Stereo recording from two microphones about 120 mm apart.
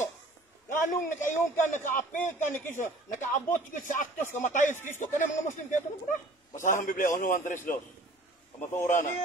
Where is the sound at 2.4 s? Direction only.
90° left.